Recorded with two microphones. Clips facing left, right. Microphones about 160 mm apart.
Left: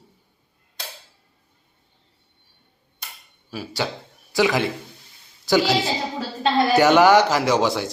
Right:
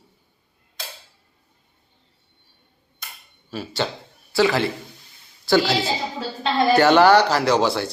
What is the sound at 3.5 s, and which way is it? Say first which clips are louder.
A man's voice: right 1 dB; 10° left (ahead or behind).